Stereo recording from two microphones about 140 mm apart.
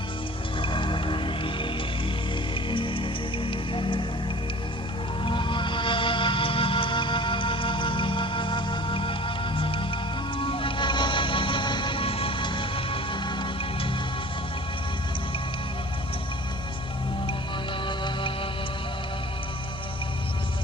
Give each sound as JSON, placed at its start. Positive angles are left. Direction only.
{"t": 0.6, "sound": "music", "side_deg": 35}
{"t": 5.2, "sound": "music", "side_deg": 35}
{"t": 17.8, "sound": "music", "side_deg": 35}